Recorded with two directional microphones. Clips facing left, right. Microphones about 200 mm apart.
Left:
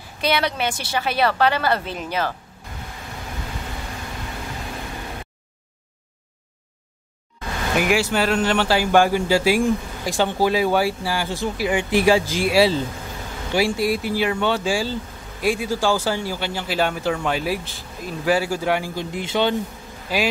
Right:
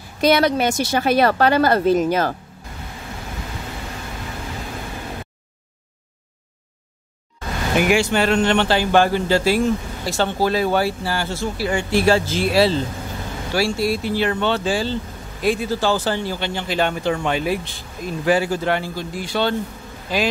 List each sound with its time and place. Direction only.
0.2 s a woman's voice: 45° right (ahead or behind)
7.7 s speech: centre (ahead or behind); by 19.5 s 20° left (ahead or behind)